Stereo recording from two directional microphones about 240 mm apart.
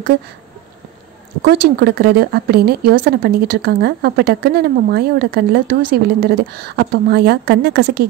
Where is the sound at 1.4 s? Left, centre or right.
Right.